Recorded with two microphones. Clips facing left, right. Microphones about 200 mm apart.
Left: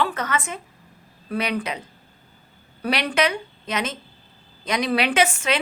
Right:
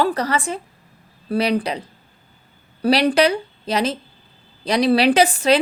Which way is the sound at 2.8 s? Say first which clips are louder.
Right 7 dB; 35° right (ahead or behind).